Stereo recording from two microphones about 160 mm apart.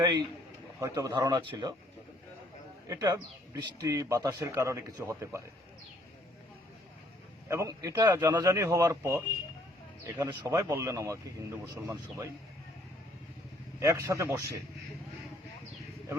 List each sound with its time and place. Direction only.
0.0 s speech: 25° right (ahead or behind)
2.8 s speech: 20° right (ahead or behind)
7.4 s speech: 20° right (ahead or behind)
13.7 s speech: 20° right (ahead or behind)